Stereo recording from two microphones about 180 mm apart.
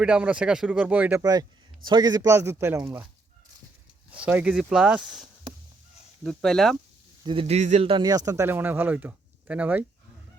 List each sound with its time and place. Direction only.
0.0 s speech: 5° right (ahead or behind)
1.2 s speech: 20° right (ahead or behind)
4.1 s speech: 10° right (ahead or behind)
7.3 s speech: 30° right (ahead or behind); by 9.8 s 10° right (ahead or behind)